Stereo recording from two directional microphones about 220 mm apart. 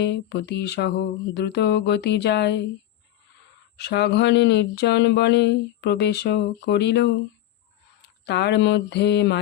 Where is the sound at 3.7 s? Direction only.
50° left (ahead or behind).